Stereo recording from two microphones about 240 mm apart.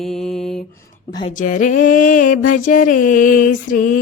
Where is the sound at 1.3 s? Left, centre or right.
Left.